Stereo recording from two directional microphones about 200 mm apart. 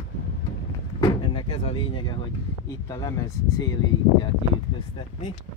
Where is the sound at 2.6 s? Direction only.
20° left (ahead or behind).